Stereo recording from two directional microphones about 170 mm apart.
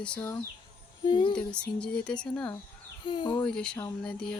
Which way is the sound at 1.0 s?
25° left (ahead or behind).